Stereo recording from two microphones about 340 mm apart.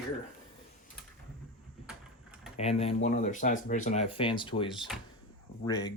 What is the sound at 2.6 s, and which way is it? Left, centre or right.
Speech, centre.